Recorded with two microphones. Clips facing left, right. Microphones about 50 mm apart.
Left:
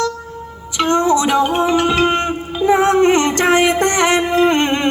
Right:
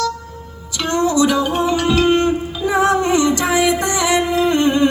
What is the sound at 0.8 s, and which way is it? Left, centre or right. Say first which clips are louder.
Music: left 2 dB; left.